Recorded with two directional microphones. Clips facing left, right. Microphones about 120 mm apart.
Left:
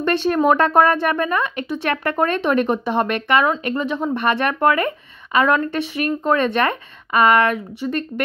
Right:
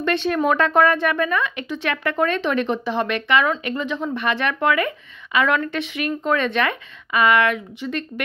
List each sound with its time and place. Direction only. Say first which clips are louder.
0.0 s speech: left 3 dB; 40° left (ahead or behind)